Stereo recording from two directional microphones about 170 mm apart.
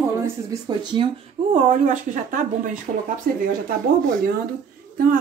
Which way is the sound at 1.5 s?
45° right (ahead or behind).